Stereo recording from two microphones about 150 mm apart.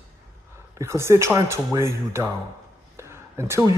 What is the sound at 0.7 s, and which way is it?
Speech, 20° right (ahead or behind).